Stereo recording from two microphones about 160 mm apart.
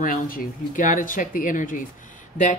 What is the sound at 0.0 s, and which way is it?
Speech, 60° left (ahead or behind).